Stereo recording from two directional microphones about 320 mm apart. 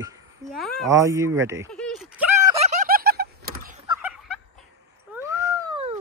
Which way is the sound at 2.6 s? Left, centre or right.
Right.